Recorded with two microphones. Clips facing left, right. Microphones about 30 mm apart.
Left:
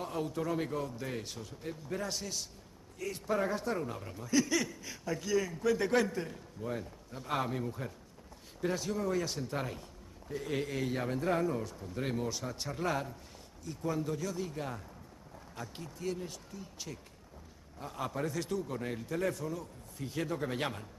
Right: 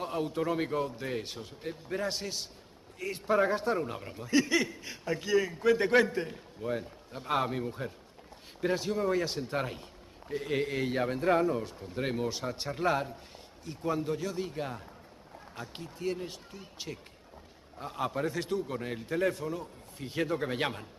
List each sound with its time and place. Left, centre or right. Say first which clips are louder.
0.0 s speech: right 4 dB; right